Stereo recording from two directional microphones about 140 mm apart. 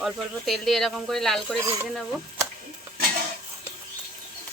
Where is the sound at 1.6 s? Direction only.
20° right (ahead or behind).